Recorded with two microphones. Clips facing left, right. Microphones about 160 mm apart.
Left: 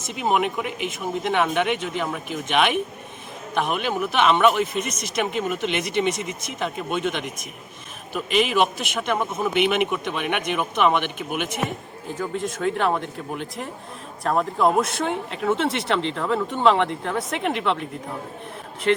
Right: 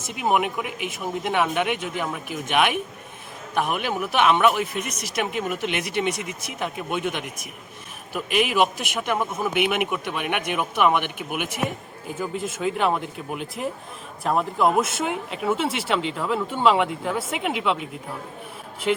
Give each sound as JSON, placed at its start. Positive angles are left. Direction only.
{"t": 0.2, "sound": "speech", "side_deg": -5}
{"t": 4.8, "sound": "speech", "side_deg": -60}
{"t": 5.0, "sound": "speech", "side_deg": -10}
{"t": 18.9, "sound": "speech", "side_deg": -5}